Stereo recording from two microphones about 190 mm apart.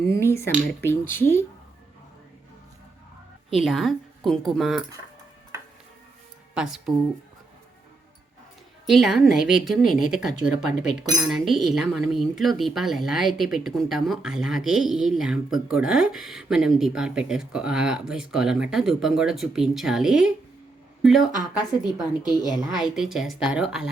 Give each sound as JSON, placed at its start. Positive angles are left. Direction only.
{"t": 0.2, "sound": "speech", "side_deg": 15}
{"t": 3.5, "sound": "speech", "side_deg": 0}
{"t": 6.5, "sound": "speech", "side_deg": -5}
{"t": 8.9, "sound": "speech", "side_deg": 0}
{"t": 21.8, "sound": "speech", "side_deg": 20}
{"t": 22.8, "sound": "speech", "side_deg": 0}